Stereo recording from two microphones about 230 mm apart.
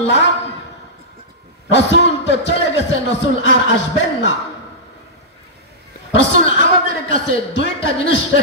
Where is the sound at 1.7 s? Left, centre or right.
Left.